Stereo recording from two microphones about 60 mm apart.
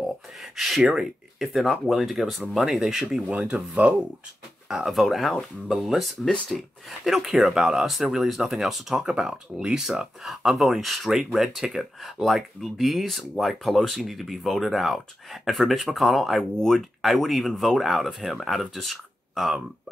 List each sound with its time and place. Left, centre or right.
0.0 s a sound: centre
0.9 s speech: centre
3.3 s speech: centre
4.6 s speech: centre
4.9 s speech: centre